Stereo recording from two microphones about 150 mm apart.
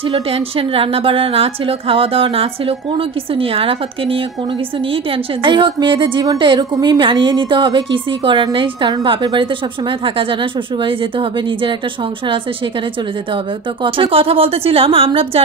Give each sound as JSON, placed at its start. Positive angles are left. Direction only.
{"t": 0.0, "sound": "a woman's voice", "side_deg": -40}
{"t": 13.8, "sound": "a woman's voice", "side_deg": -35}